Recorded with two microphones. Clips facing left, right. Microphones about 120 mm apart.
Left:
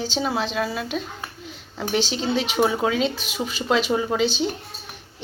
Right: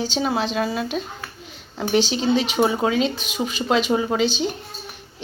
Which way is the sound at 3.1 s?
50° right (ahead or behind).